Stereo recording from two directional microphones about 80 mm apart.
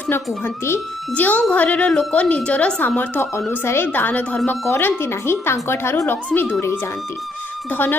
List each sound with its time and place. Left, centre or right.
1.1 s a woman's voice: centre
3.6 s a woman's voice: left
7.7 s a woman's voice: left